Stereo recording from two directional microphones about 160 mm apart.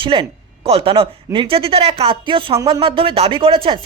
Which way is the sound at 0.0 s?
35° right (ahead or behind).